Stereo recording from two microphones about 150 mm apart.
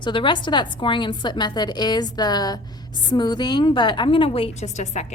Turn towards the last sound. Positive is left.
turn(degrees=50)  # may be behind; listen again after turning